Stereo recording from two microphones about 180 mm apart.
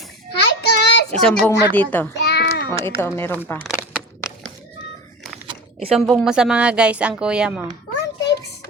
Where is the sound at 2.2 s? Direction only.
65° left (ahead or behind).